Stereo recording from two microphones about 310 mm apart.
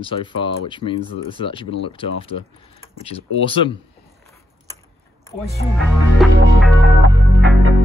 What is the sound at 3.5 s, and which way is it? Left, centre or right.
Speech, centre.